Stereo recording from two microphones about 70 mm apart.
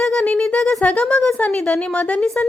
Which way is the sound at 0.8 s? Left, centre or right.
Left.